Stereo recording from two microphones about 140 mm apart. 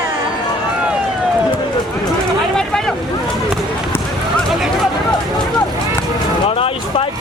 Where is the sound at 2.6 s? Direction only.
5° left (ahead or behind).